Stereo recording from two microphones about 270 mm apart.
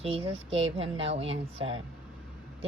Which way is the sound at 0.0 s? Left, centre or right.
Right.